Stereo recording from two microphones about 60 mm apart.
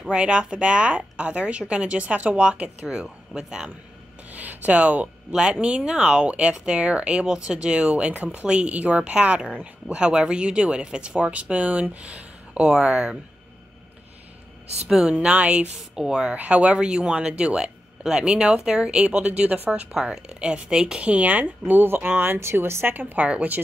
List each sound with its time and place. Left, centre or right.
0.1 s speech: centre
4.3 s a sound: right
5.3 s speech: centre
14.9 s speech: centre
21.0 s speech: right
23.2 s speech: centre